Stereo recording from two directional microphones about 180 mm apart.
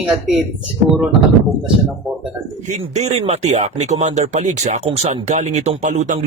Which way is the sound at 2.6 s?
40° right (ahead or behind).